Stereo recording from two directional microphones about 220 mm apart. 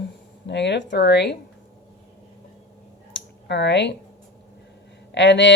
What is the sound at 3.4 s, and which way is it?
Speech, 50° left (ahead or behind).